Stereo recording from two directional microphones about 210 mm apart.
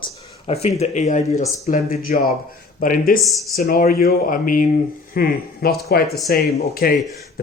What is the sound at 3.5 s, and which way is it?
Speech, 45° left (ahead or behind).